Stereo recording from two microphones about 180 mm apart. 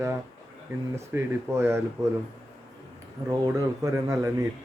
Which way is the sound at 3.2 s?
20° right (ahead or behind).